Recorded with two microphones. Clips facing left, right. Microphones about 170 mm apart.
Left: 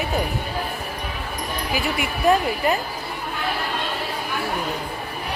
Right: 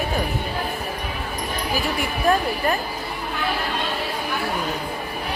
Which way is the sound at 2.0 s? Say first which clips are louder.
Left 2 dB; 20° left (ahead or behind).